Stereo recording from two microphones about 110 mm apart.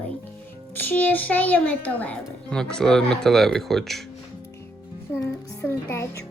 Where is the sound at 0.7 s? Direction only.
15° left (ahead or behind).